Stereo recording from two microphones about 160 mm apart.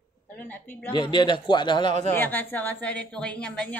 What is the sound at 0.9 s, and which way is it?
Speech, 30° left (ahead or behind).